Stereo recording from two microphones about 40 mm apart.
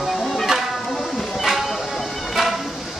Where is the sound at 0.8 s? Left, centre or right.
Centre.